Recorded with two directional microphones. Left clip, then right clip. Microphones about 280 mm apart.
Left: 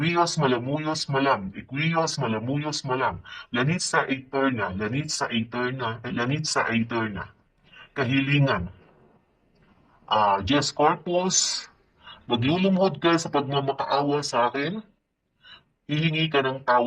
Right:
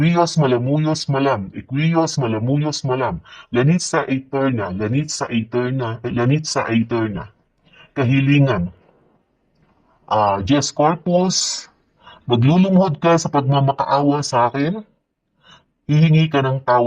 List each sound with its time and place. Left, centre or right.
0.0 s speech: right
10.1 s speech: right
12.3 s speech: right
15.9 s speech: right